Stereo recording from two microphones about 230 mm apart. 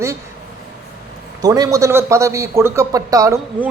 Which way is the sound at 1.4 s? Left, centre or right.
Centre.